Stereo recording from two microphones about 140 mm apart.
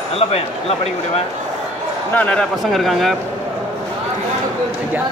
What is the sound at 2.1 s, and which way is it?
A man's voice, 10° left (ahead or behind).